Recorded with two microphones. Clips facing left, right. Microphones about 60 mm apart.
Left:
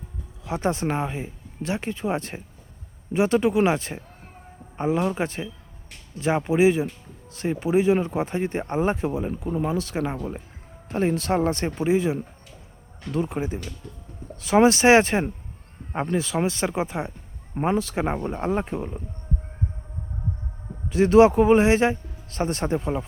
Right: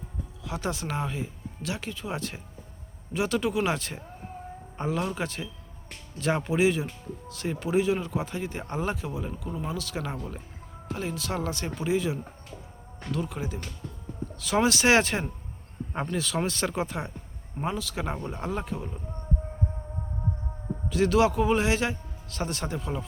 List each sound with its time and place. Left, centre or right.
0.4 s speech: left
10.8 s speech: left
17.5 s speech: left
20.9 s speech: left